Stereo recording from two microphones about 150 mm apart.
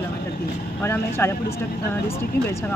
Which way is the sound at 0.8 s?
15° left (ahead or behind).